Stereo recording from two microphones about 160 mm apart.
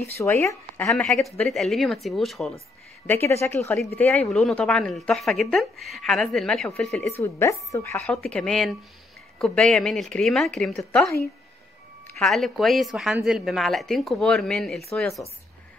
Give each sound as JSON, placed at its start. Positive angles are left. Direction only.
{"t": 0.2, "sound": "speech", "side_deg": 20}
{"t": 0.8, "sound": "speech", "side_deg": 5}
{"t": 3.1, "sound": "speech", "side_deg": 15}
{"t": 7.1, "sound": "speech", "side_deg": 15}
{"t": 12.2, "sound": "speech", "side_deg": 0}